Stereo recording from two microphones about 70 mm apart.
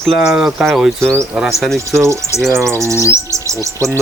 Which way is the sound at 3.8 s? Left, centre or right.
Right.